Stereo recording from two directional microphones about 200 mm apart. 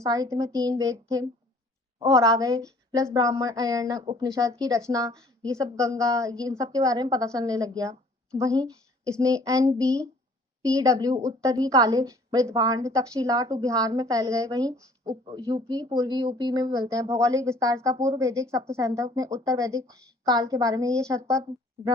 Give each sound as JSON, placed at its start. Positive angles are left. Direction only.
{"t": 0.0, "sound": "a woman's voice", "side_deg": -15}